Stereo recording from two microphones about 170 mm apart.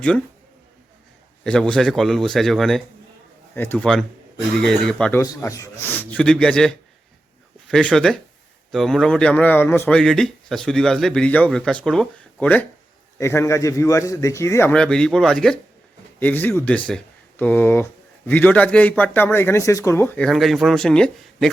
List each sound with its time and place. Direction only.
1.5 s a man's voice: 5° left (ahead or behind)
5.2 s a man's voice: 20° left (ahead or behind)
14.7 s a man's voice: 5° left (ahead or behind)